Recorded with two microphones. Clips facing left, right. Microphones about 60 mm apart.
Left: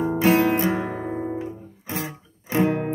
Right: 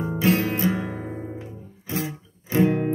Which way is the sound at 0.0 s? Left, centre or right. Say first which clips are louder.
Left 4 dB; left.